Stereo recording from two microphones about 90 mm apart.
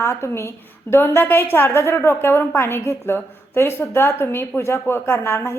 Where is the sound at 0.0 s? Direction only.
30° left (ahead or behind).